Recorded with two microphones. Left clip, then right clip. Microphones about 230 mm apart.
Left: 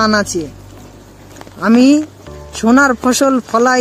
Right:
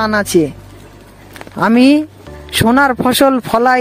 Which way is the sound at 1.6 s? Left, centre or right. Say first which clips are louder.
Right 1 dB; right.